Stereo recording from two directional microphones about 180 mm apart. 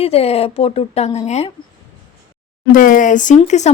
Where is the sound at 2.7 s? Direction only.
50° left (ahead or behind).